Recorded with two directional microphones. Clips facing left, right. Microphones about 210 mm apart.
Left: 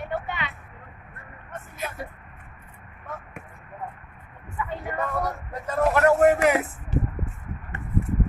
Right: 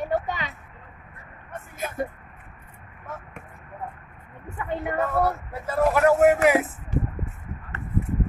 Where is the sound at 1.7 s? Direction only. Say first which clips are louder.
Right 5 dB; 50° right (ahead or behind).